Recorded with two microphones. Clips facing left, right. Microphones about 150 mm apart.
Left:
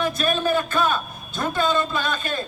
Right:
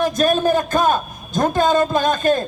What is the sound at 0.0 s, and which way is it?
A man's voice, 40° right (ahead or behind).